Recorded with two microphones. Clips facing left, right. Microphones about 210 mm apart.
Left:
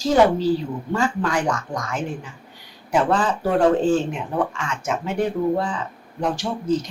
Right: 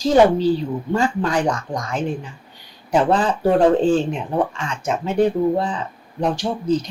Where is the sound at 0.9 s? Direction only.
25° right (ahead or behind).